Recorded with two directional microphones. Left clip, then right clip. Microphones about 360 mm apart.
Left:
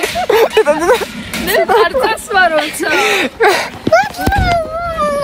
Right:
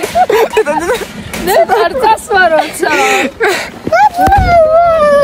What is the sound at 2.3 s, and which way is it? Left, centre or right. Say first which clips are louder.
Speech: right 3 dB; right.